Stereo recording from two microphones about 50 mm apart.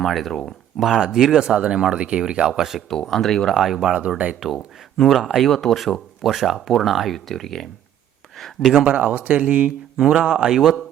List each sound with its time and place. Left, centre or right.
0.0 s speech: centre
2.9 s speech: centre
3.5 s speech: centre
8.8 s speech: right
10.0 s speech: centre